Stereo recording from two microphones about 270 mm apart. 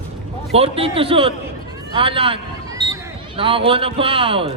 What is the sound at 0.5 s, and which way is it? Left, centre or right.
A man's voice, right.